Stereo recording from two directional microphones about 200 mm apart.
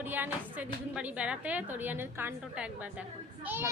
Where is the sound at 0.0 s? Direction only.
10° right (ahead or behind).